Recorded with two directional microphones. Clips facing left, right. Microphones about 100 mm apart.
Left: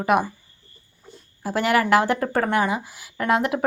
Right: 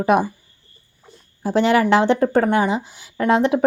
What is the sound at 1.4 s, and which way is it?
Speech, 25° right (ahead or behind).